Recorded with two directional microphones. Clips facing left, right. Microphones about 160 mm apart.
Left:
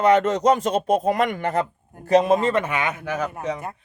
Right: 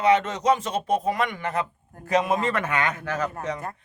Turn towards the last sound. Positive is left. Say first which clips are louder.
# left 2 dB
turn(degrees=10)  # may be behind; listen again after turning